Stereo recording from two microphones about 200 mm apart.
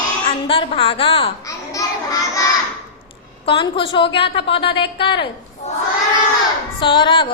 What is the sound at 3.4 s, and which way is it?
A woman's voice, 25° left (ahead or behind).